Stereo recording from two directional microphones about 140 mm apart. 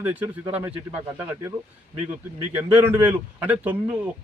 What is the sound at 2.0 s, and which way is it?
Speech, 15° right (ahead or behind).